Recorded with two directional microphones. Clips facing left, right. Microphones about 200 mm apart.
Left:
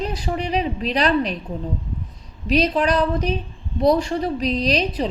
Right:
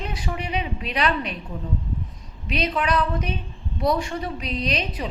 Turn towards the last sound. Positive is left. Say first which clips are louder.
# left 6 dB
turn(degrees=35)  # may be behind; listen again after turning